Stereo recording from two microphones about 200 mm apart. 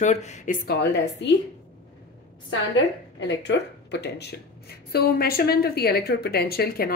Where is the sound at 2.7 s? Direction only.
65° left (ahead or behind).